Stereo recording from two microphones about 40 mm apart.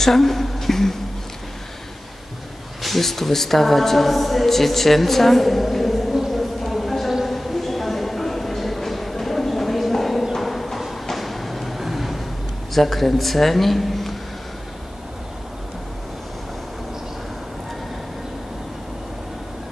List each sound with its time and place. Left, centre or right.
0.0 s a woman's voice: centre
2.8 s speech: centre
7.2 s a sound: centre
12.7 s a man's voice: centre